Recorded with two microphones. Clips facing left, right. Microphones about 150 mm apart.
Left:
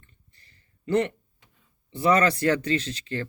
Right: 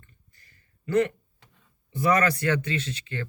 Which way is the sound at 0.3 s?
30° left (ahead or behind).